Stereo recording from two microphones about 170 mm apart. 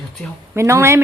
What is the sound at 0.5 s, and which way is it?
Speech, 15° right (ahead or behind).